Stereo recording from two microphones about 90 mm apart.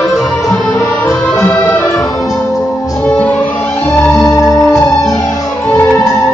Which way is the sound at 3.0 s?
15° left (ahead or behind).